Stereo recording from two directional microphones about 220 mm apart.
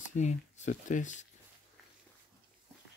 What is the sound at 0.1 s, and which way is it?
Speech, 35° left (ahead or behind).